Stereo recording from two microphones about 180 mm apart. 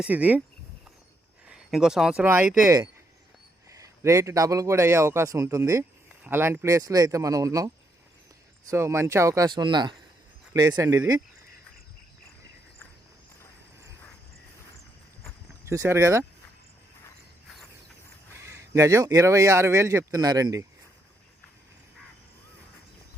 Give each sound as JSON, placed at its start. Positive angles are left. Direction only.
{"t": 0.0, "sound": "speech", "side_deg": -10}
{"t": 1.5, "sound": "speech", "side_deg": -5}
{"t": 8.7, "sound": "speech", "side_deg": -15}
{"t": 15.6, "sound": "speech", "side_deg": -15}
{"t": 18.3, "sound": "speech", "side_deg": -15}